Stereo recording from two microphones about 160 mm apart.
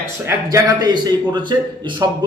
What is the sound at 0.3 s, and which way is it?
Speech, 20° right (ahead or behind).